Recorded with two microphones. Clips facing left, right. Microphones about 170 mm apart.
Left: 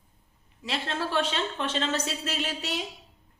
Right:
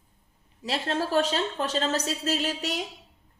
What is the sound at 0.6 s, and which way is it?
A woman's voice, 40° right (ahead or behind).